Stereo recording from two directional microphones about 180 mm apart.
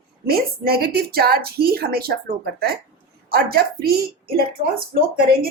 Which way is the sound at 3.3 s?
60° right (ahead or behind).